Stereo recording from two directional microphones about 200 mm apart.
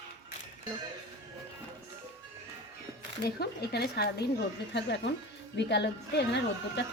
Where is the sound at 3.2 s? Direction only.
50° left (ahead or behind).